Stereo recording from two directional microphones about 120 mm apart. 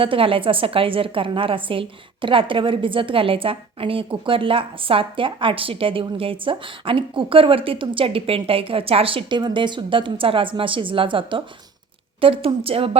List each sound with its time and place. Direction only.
0.0 s a woman's voice: 50° right (ahead or behind)